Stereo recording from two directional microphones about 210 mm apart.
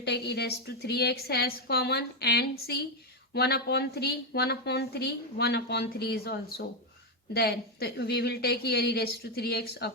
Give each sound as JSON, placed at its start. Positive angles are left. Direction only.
{"t": 0.0, "sound": "a woman's voice", "side_deg": 50}